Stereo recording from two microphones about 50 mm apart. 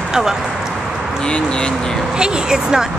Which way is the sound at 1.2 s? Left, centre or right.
Centre.